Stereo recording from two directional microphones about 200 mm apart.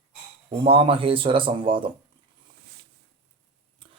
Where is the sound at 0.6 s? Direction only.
25° right (ahead or behind).